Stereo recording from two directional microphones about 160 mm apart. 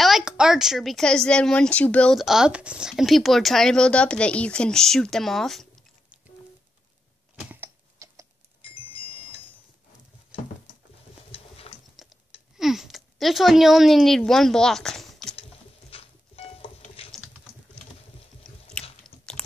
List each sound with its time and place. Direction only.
0.0 s speech: 5° right (ahead or behind)
7.6 s typing: 20° right (ahead or behind)
10.3 s patter: 35° left (ahead or behind)
11.3 s a sound: 40° left (ahead or behind)
12.0 s a sound: centre (ahead or behind)
12.5 s speech: centre (ahead or behind)
15.9 s music: 35° left (ahead or behind)
17.0 s typing: 35° left (ahead or behind)
18.4 s squish: 5° left (ahead or behind)
19.0 s computer keyboard: 5° left (ahead or behind)